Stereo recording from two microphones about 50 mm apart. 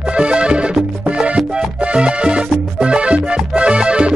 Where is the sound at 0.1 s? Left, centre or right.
Centre.